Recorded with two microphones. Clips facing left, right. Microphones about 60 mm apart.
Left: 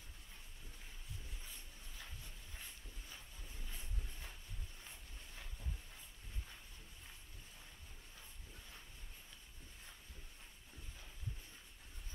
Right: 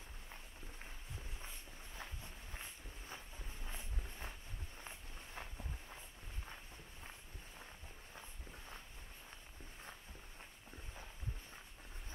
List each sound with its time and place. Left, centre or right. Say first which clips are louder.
2.0 s walk: right 5 dB; right
3.6 s a sound: right 3 dB; right
4.8 s walk: right 4 dB; right